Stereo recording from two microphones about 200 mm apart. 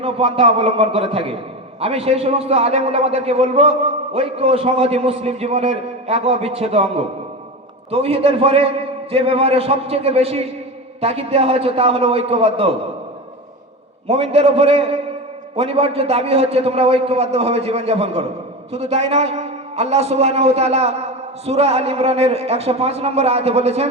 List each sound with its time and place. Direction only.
0.0 s a man's voice: 30° right (ahead or behind)
14.1 s a man's voice: 30° right (ahead or behind)